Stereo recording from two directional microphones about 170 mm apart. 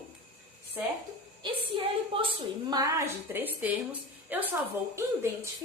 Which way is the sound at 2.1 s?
30° right (ahead or behind).